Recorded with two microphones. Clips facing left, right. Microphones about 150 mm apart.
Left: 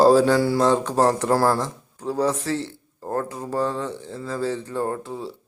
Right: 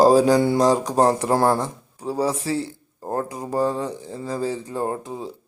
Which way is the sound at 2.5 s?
10° right (ahead or behind).